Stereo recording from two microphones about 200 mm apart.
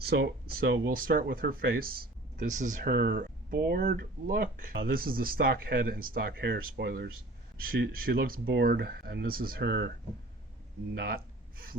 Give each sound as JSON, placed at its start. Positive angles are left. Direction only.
{"t": 0.0, "sound": "speech", "side_deg": -50}
{"t": 10.9, "sound": "speech", "side_deg": -50}